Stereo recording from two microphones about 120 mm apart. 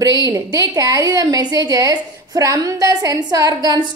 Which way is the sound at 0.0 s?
30° right (ahead or behind).